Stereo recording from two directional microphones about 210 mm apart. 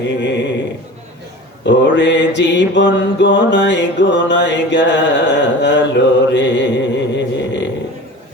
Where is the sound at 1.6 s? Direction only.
60° left (ahead or behind).